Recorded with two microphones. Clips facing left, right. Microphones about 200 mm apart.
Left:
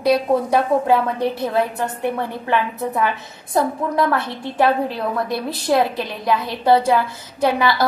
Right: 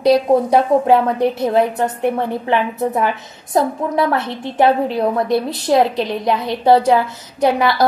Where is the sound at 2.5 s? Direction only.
20° right (ahead or behind).